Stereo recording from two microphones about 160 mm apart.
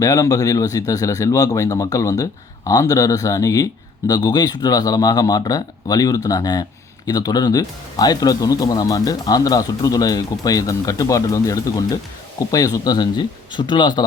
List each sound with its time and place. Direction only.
0.0 s speech: 20° left (ahead or behind)